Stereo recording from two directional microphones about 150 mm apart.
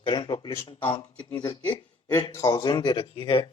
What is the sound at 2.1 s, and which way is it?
Speech, 25° left (ahead or behind).